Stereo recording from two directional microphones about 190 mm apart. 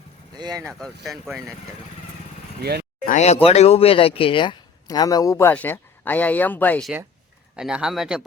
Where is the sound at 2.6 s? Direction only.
55° right (ahead or behind).